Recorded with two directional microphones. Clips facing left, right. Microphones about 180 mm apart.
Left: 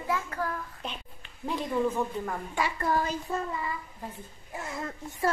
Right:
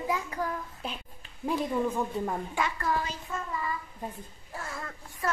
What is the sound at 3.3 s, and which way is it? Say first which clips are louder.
Speech: left 4 dB; 30° left (ahead or behind).